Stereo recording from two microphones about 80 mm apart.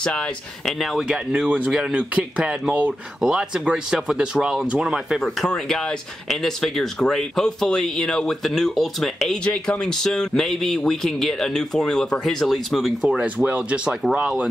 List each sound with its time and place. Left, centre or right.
0.0 s speech: centre
0.7 s speech: centre
5.2 s speech: centre
13.2 s speech: centre